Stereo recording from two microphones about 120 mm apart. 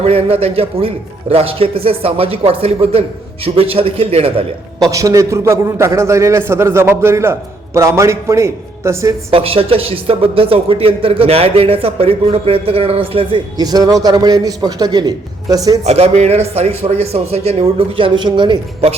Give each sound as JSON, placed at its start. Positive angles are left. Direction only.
{"t": 0.0, "sound": "speech", "side_deg": -55}
{"t": 4.8, "sound": "a man's voice", "side_deg": -30}
{"t": 9.3, "sound": "speech", "side_deg": -50}
{"t": 13.6, "sound": "a man's voice", "side_deg": -30}
{"t": 15.9, "sound": "speech", "side_deg": -65}